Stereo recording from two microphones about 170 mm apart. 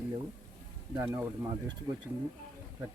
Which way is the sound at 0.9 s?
10° right (ahead or behind).